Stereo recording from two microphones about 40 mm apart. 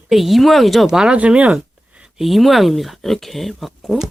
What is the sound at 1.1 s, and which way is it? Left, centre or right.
Speech, right.